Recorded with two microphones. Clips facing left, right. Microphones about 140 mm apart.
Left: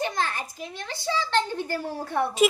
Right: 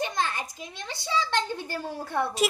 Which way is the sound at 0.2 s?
20° right (ahead or behind).